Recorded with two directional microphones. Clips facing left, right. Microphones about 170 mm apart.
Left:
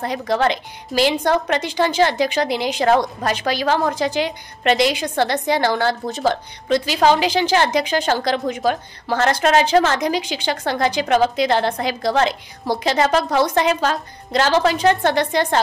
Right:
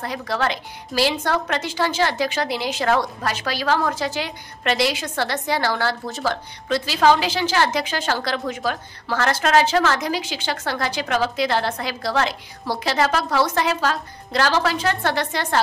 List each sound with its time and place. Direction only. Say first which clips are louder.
0.0 s a woman's voice: left 5 dB; 20° left (ahead or behind)